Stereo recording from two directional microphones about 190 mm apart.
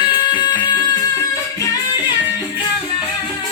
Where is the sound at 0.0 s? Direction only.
25° left (ahead or behind).